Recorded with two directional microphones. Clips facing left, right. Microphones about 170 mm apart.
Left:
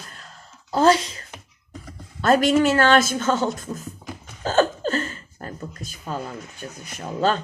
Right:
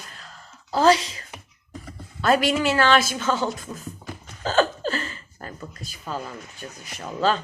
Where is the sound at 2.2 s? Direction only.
45° left (ahead or behind).